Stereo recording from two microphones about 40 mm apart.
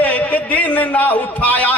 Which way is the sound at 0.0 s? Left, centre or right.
Left.